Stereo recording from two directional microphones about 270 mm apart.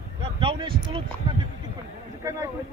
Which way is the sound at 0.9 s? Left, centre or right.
Centre.